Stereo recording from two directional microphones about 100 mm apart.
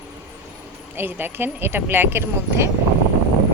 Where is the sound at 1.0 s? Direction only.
20° right (ahead or behind).